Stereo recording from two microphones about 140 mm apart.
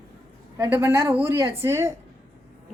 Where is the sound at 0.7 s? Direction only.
20° right (ahead or behind).